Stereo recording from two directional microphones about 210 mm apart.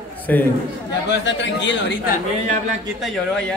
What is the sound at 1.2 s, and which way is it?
Speech, 60° left (ahead or behind).